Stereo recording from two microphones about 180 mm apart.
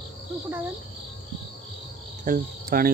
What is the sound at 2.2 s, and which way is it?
Cricket, 50° right (ahead or behind).